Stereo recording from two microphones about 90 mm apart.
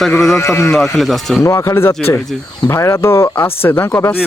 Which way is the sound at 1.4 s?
30° left (ahead or behind).